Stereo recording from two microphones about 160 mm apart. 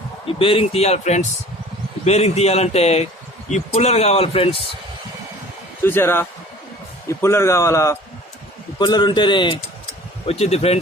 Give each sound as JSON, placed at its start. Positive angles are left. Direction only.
{"t": 0.3, "sound": "speech", "side_deg": 35}
{"t": 5.8, "sound": "a man's voice", "side_deg": 15}
{"t": 8.8, "sound": "a man's voice", "side_deg": 30}